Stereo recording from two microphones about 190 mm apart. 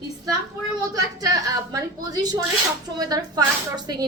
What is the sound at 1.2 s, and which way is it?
A woman's voice, 20° right (ahead or behind).